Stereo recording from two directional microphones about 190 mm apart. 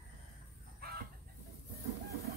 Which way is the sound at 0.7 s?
55° right (ahead or behind).